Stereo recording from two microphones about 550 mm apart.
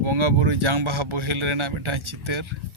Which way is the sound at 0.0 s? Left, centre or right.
Right.